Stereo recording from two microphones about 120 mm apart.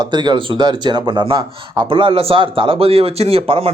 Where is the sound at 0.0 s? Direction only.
40° right (ahead or behind).